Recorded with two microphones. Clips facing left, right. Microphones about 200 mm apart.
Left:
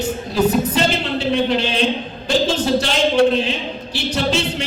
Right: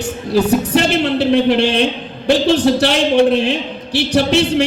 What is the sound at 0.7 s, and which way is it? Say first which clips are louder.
Speech: right 5 dB; 65° right (ahead or behind).